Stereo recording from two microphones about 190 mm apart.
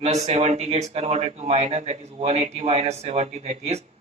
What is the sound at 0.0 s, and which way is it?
Speech, 35° right (ahead or behind).